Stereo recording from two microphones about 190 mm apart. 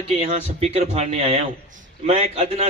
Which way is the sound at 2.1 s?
35° right (ahead or behind).